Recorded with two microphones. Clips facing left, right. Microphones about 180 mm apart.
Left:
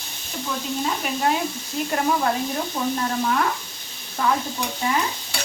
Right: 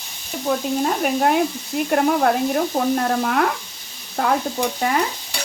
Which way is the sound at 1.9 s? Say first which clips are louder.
Right 5 dB; 55° right (ahead or behind).